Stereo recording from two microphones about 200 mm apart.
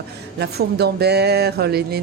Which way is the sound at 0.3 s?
55° right (ahead or behind).